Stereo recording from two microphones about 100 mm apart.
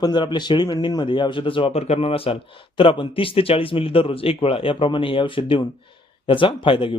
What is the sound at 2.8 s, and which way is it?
Speech, 60° left (ahead or behind).